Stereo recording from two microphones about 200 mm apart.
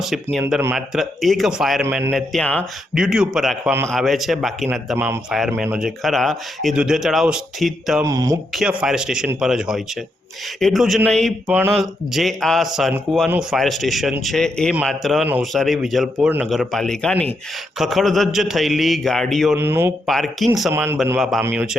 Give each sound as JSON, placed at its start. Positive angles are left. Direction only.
{"t": 0.5, "sound": "a man's voice", "side_deg": 0}
{"t": 8.0, "sound": "speech", "side_deg": -15}
{"t": 8.5, "sound": "a man's voice", "side_deg": -5}
{"t": 19.5, "sound": "speech", "side_deg": -10}
{"t": 20.1, "sound": "a man's voice", "side_deg": 0}
{"t": 21.2, "sound": "a man's voice", "side_deg": 0}